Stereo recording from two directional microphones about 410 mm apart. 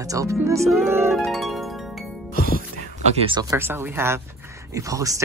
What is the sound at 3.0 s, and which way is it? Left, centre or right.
Speech, centre.